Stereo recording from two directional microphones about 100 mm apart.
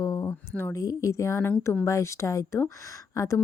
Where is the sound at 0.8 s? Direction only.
35° left (ahead or behind).